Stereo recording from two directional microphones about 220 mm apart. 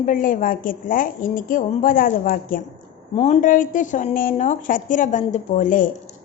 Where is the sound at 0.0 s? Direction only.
40° left (ahead or behind).